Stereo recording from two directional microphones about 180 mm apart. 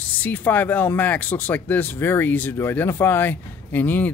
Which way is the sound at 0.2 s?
10° left (ahead or behind).